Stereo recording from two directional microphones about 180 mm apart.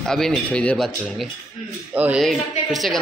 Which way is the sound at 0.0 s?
5° left (ahead or behind).